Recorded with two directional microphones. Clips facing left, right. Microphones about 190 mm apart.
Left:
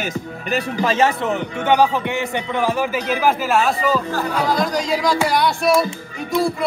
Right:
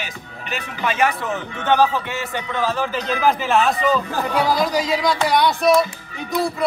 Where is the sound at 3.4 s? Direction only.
Centre (ahead or behind).